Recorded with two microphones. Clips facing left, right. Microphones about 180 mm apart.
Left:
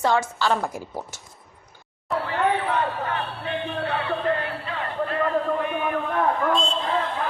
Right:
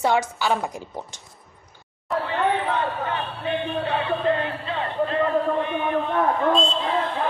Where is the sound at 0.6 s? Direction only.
5° left (ahead or behind).